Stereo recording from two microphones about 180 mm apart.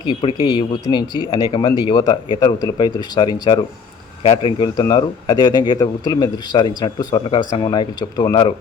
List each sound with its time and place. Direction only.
0.1 s a man's voice: 30° left (ahead or behind)